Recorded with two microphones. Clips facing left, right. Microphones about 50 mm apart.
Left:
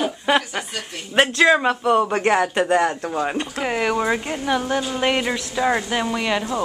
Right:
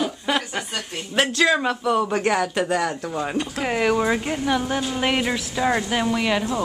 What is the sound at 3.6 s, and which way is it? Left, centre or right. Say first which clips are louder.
Speech: right 1 dB; centre.